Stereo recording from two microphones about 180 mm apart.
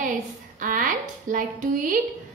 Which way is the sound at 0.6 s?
45° right (ahead or behind).